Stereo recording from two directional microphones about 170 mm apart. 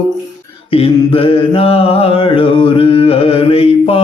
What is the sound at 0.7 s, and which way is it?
Mantra, 35° left (ahead or behind).